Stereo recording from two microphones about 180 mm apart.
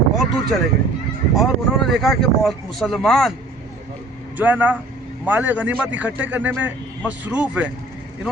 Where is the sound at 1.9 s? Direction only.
Centre (ahead or behind).